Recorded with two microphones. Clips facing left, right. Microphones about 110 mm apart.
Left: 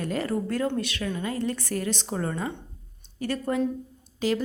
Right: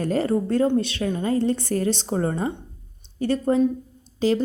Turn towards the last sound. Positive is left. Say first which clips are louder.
# right 5 dB
turn(degrees=-30)  # may be behind; listen again after turning